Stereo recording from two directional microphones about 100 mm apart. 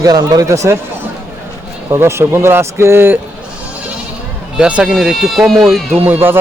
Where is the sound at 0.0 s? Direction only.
40° right (ahead or behind).